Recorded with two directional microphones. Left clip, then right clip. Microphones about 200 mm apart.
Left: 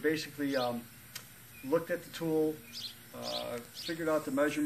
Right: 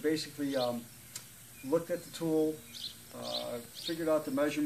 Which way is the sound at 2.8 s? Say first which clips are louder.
Even; 65° left (ahead or behind).